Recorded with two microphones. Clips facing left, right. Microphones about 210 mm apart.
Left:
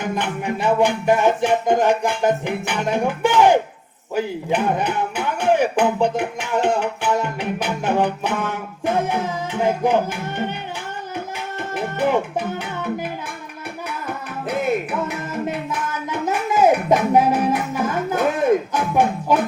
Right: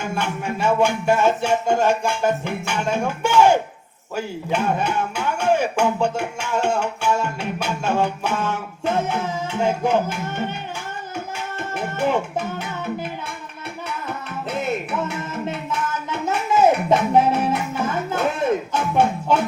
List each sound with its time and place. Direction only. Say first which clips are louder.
0.0 s speech: left 2 dB; 15° left (ahead or behind)
4.1 s music: left 3 dB; 15° left (ahead or behind)
11.7 s music: left 2 dB; 15° left (ahead or behind)
15.4 s music: left 1 dB; 15° left (ahead or behind)
18.7 s speech: left 1 dB; 15° left (ahead or behind)